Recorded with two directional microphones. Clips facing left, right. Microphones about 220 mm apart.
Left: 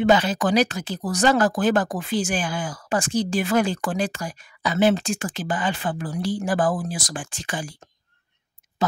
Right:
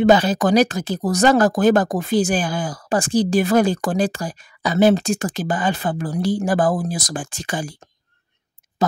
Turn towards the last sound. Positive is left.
turn(degrees=-40)  # may be behind; listen again after turning